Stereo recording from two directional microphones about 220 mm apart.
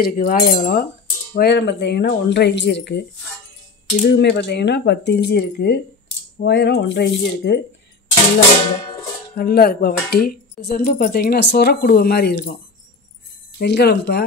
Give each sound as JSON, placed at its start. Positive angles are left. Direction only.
{"t": 0.0, "sound": "speech", "side_deg": 40}
{"t": 4.1, "sound": "speech", "side_deg": 50}
{"t": 9.3, "sound": "speech", "side_deg": 45}
{"t": 13.6, "sound": "speech", "side_deg": 50}